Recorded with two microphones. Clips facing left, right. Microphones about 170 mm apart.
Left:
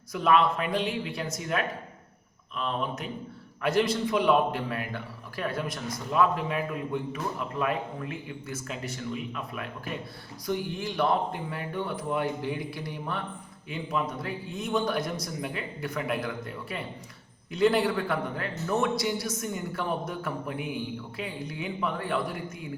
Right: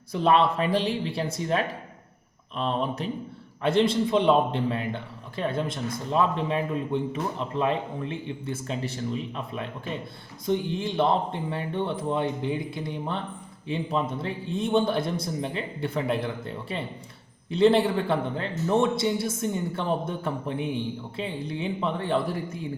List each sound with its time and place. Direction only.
0.1 s a man's voice: 30° right (ahead or behind)